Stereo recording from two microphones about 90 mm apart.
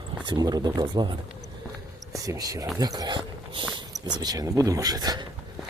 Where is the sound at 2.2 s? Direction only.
40° right (ahead or behind).